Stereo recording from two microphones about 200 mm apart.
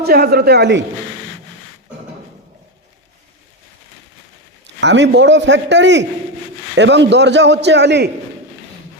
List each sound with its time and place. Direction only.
0.0 s a man's voice: 50° right (ahead or behind)
4.6 s a man's voice: 60° right (ahead or behind)